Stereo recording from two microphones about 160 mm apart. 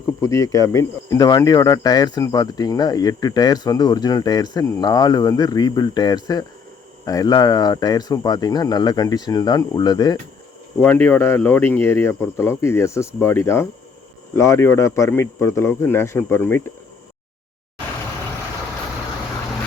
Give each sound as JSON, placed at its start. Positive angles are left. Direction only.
{"t": 0.2, "sound": "speech", "side_deg": 20}
{"t": 10.8, "sound": "speech", "side_deg": 10}